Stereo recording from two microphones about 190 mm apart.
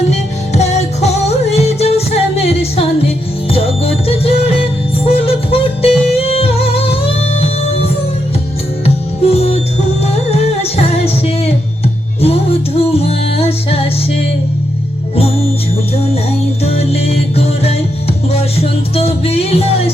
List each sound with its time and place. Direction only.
0.1 s music: 35° left (ahead or behind)
9.3 s music: 30° left (ahead or behind)
16.6 s music: 30° left (ahead or behind)